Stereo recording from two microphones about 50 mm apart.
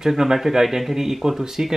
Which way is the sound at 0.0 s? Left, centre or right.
Centre.